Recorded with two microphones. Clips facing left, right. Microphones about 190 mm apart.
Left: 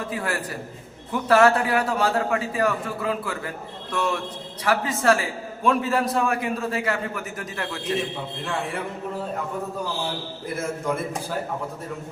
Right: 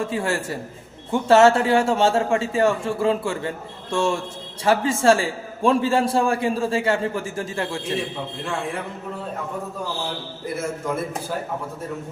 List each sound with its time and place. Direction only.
0.0 s a man's voice: 25° right (ahead or behind)